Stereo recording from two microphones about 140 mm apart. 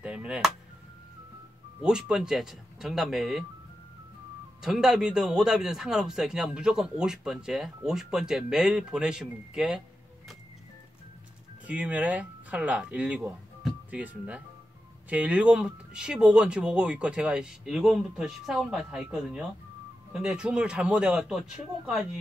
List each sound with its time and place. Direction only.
0.0 s chop: 5° right (ahead or behind)
1.8 s a man's voice: 5° right (ahead or behind)
4.6 s a man's voice: 5° right (ahead or behind)
11.6 s a man's voice: 10° right (ahead or behind)